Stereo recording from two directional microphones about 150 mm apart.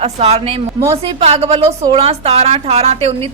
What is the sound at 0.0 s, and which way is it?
A woman's voice, 45° right (ahead or behind).